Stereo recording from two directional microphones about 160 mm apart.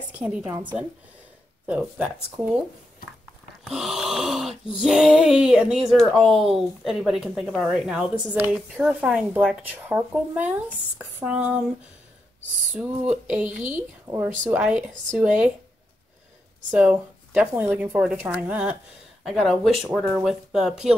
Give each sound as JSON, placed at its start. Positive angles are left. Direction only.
{"t": 0.1, "sound": "speech", "side_deg": -10}
{"t": 3.6, "sound": "speech", "side_deg": 0}
{"t": 13.1, "sound": "speech", "side_deg": -5}
{"t": 14.5, "sound": "speech", "side_deg": -5}
{"t": 16.7, "sound": "speech", "side_deg": -10}